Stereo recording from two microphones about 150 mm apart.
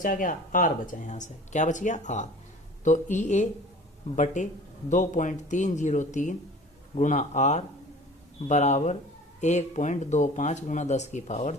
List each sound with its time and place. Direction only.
0.0 s speech: 65° left (ahead or behind)